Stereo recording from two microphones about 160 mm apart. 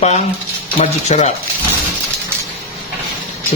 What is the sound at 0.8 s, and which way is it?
Speech, 45° left (ahead or behind).